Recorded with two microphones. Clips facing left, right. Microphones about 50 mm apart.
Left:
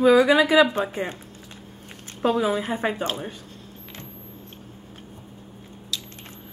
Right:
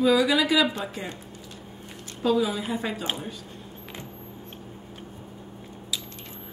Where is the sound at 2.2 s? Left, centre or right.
Left.